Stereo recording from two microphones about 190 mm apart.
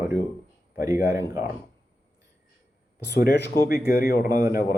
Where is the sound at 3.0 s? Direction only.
55° left (ahead or behind).